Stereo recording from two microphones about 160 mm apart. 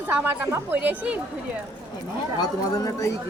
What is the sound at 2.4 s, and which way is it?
Speech, 20° left (ahead or behind).